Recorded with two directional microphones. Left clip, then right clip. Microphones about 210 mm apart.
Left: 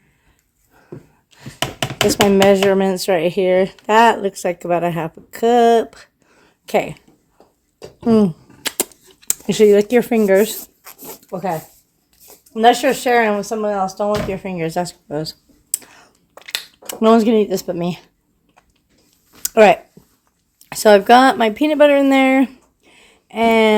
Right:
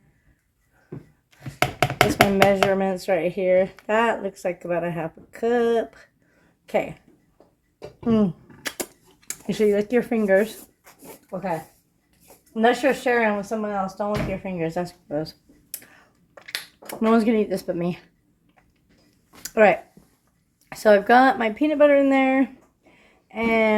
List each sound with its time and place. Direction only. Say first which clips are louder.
2.0 s speech: left 8 dB; 40° left (ahead or behind)
8.0 s a sound: left 7 dB; 35° left (ahead or behind)
11.0 s zipper: left 7 dB; 50° left (ahead or behind)
12.5 s speech: left 7 dB; 45° left (ahead or behind); by 18.1 s 25° left (ahead or behind)
19.4 s a sound: left 6 dB; 30° left (ahead or behind)
20.7 s speech: left 6 dB; 35° left (ahead or behind)